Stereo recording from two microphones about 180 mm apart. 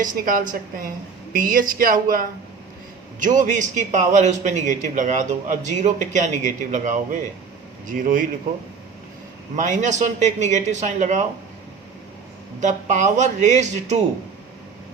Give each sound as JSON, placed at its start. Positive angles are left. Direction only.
{"t": 0.0, "sound": "a man's voice", "side_deg": -50}
{"t": 9.6, "sound": "speech", "side_deg": -45}
{"t": 12.5, "sound": "speech", "side_deg": -40}